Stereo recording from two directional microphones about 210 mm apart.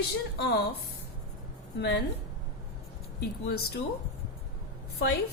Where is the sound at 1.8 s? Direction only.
55° left (ahead or behind).